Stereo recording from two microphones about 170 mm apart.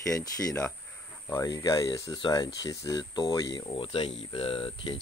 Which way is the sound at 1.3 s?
20° left (ahead or behind).